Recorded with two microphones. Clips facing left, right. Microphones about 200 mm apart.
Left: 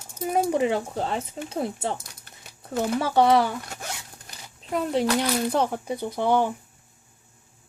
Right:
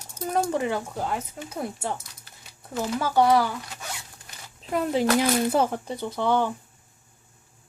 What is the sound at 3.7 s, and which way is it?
Zipper, 50° left (ahead or behind).